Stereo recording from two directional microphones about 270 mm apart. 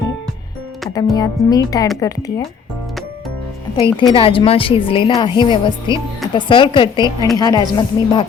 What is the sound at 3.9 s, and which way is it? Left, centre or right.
A woman's voice, centre.